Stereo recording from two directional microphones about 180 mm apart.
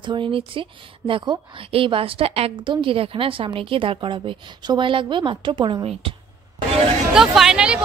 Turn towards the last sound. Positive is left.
turn(degrees=-5)  # may be behind; listen again after turning